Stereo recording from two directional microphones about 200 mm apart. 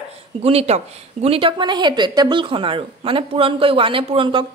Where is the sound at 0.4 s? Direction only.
30° right (ahead or behind).